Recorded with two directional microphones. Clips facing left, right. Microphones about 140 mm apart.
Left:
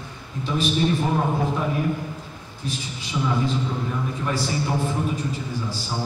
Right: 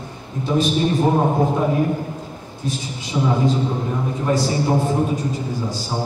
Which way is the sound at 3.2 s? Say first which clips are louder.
Right 5 dB; 35° right (ahead or behind).